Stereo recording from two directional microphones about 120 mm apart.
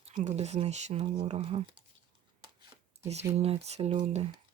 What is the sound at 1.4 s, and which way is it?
Speech, 45° right (ahead or behind).